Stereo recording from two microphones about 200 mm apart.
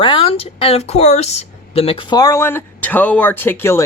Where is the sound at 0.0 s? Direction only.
25° left (ahead or behind).